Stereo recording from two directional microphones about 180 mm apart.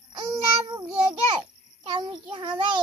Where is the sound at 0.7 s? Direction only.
25° right (ahead or behind).